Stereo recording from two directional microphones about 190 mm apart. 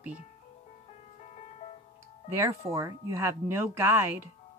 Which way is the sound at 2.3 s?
15° right (ahead or behind).